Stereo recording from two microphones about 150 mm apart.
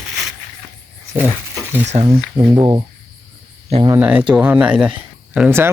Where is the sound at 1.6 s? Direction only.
15° right (ahead or behind).